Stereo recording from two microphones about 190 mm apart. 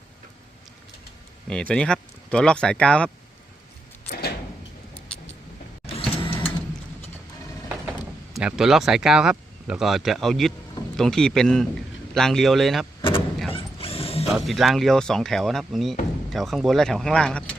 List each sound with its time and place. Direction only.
1.5 s speech: 5° left (ahead or behind)
5.1 s vehicle: 5° left (ahead or behind)
5.8 s vehicle: 30° left (ahead or behind)
8.3 s speech: 5° right (ahead or behind)
13.0 s vehicle: 25° left (ahead or behind)
13.5 s mechanisms: 30° left (ahead or behind)
14.3 s speech: centre (ahead or behind)